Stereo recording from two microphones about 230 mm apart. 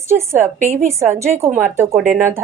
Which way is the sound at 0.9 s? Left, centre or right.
Centre.